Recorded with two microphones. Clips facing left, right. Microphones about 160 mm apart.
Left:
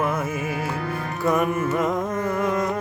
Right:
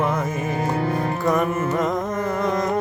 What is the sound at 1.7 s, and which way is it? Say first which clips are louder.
Carnatic music: right 1 dB; 10° left (ahead or behind).